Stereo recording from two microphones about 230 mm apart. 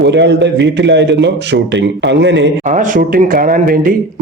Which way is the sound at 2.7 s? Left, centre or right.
Right.